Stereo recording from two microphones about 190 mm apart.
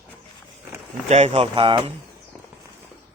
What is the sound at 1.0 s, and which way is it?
Speech, 35° right (ahead or behind).